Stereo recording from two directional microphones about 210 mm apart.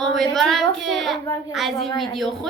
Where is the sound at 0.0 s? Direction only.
Centre (ahead or behind).